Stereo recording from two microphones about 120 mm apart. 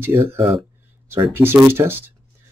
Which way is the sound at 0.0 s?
20° right (ahead or behind).